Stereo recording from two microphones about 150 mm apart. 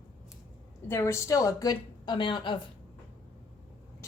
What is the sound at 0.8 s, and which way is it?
A woman's voice, 20° left (ahead or behind).